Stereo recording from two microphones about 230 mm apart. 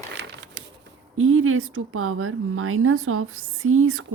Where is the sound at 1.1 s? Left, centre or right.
Right.